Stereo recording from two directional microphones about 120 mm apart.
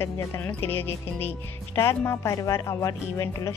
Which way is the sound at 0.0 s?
20° left (ahead or behind).